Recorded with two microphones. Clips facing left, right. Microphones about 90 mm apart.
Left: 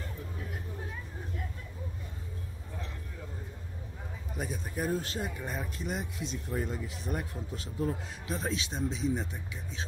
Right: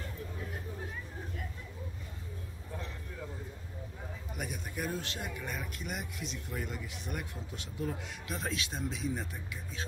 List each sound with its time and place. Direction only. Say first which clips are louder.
4.4 s a man's voice: left 4 dB; 30° left (ahead or behind)